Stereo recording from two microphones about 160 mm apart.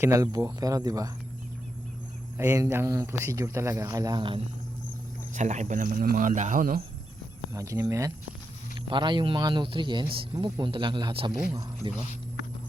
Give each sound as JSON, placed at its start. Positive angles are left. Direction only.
{"t": 0.0, "sound": "speech", "side_deg": -20}
{"t": 2.4, "sound": "speech", "side_deg": -15}
{"t": 5.3, "sound": "speech", "side_deg": -45}
{"t": 7.5, "sound": "speech", "side_deg": -20}
{"t": 8.9, "sound": "speech", "side_deg": -30}